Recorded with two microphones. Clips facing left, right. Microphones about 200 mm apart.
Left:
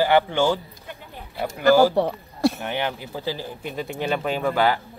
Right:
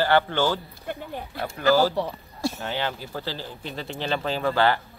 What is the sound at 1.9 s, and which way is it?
Speech, 60° left (ahead or behind).